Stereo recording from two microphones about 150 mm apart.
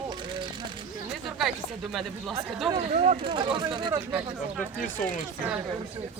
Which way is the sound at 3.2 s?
35° right (ahead or behind).